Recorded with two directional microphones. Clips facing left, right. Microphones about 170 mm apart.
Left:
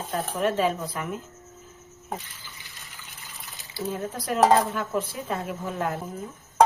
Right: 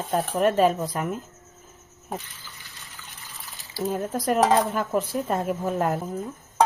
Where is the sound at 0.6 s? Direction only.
45° right (ahead or behind).